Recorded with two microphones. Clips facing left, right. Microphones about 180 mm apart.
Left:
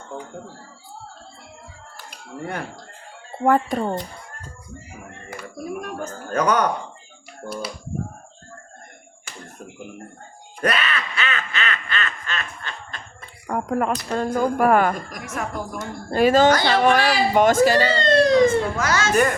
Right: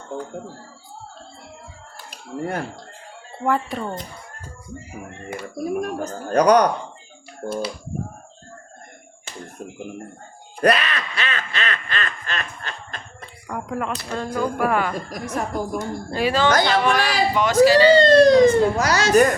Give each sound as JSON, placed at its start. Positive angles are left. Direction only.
{"t": 3.4, "sound": "a woman's voice", "side_deg": 45}
{"t": 5.8, "sound": "speech", "side_deg": -40}
{"t": 7.4, "sound": "speech", "side_deg": -25}
{"t": 10.6, "sound": "speech", "side_deg": -35}
{"t": 13.5, "sound": "a woman's voice", "side_deg": 45}
{"t": 15.1, "sound": "speech", "side_deg": -35}
{"t": 16.1, "sound": "a woman's voice", "side_deg": 45}
{"t": 18.1, "sound": "speech", "side_deg": -35}